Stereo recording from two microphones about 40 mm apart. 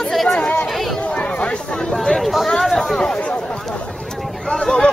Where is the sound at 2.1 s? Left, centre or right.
Centre.